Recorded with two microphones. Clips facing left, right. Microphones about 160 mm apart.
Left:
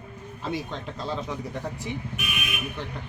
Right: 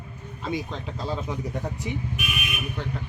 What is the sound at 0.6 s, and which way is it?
Speech, 5° right (ahead or behind).